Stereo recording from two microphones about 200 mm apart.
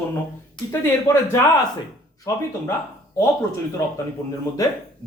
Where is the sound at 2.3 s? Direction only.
15° left (ahead or behind).